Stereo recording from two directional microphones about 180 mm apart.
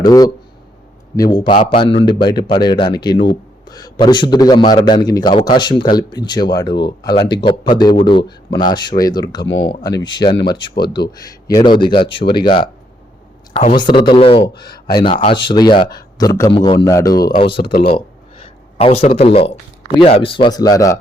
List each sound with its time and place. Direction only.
0.0 s speech: 20° left (ahead or behind)
16.8 s speech: 20° left (ahead or behind)
17.6 s speech: 60° left (ahead or behind)
18.4 s speech: 30° left (ahead or behind)